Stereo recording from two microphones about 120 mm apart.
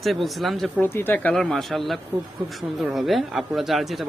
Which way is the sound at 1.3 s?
Centre (ahead or behind).